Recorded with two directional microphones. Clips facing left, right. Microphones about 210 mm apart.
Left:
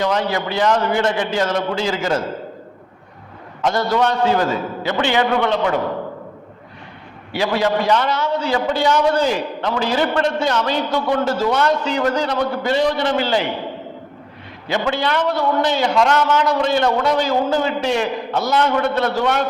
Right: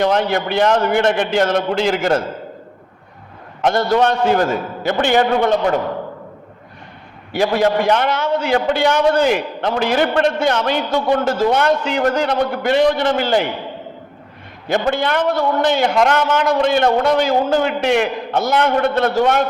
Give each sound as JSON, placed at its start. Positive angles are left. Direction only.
{"t": 0.1, "sound": "a man's voice", "side_deg": -55}
{"t": 3.6, "sound": "a man's voice", "side_deg": -55}
{"t": 7.3, "sound": "a man's voice", "side_deg": -50}
{"t": 14.7, "sound": "a man's voice", "side_deg": -50}